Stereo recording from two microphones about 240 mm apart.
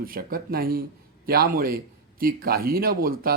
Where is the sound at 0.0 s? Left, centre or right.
Right.